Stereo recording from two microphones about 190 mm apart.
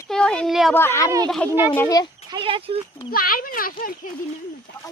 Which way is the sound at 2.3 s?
25° right (ahead or behind).